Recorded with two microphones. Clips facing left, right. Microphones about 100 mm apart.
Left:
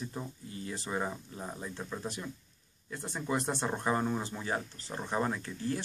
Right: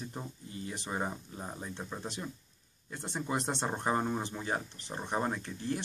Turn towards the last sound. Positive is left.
turn(degrees=-25)  # may be behind; listen again after turning